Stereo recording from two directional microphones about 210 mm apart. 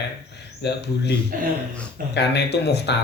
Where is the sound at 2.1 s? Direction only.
55° left (ahead or behind).